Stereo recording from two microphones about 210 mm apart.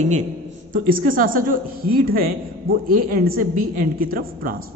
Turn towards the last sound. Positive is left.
turn(degrees=-45)  # may be behind; listen again after turning